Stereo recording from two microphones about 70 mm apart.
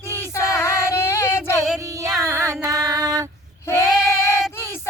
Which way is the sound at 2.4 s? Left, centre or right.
Right.